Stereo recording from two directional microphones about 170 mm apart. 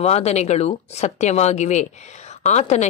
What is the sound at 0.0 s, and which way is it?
A woman's voice, 40° left (ahead or behind).